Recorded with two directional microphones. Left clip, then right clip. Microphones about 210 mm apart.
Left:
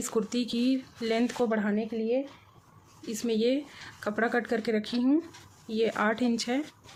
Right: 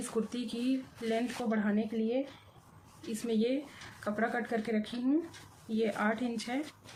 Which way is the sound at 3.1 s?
50° left (ahead or behind).